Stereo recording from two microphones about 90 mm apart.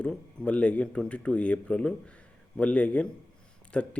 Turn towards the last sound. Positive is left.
turn(degrees=10)  # may be behind; listen again after turning